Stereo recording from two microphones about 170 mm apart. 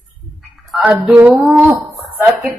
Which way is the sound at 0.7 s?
5° right (ahead or behind).